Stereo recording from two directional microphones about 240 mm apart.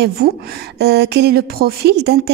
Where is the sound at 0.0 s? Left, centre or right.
Right.